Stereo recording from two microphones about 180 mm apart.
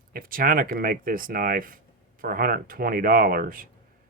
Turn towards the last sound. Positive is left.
turn(degrees=-50)  # may be behind; listen again after turning